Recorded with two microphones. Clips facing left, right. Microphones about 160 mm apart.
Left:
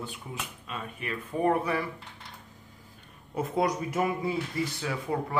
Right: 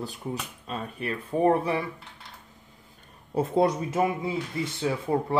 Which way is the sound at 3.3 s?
30° right (ahead or behind).